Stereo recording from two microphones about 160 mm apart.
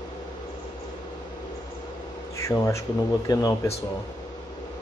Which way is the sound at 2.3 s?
20° left (ahead or behind).